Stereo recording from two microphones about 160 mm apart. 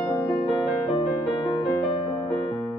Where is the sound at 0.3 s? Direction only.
35° left (ahead or behind).